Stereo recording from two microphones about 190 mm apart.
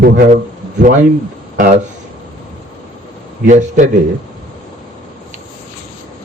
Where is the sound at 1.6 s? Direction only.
45° right (ahead or behind).